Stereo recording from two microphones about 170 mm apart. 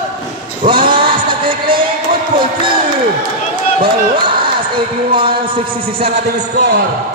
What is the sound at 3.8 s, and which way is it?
A man's voice, 30° right (ahead or behind).